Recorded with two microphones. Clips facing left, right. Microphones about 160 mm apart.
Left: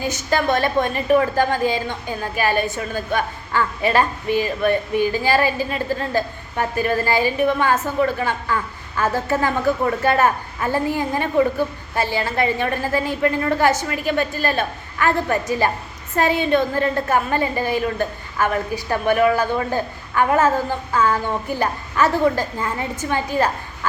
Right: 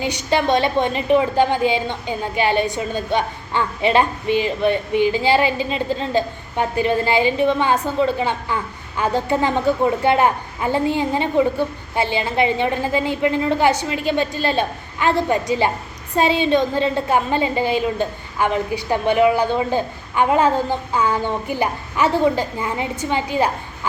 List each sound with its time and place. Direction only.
0.6 s a woman's voice: 20° right (ahead or behind)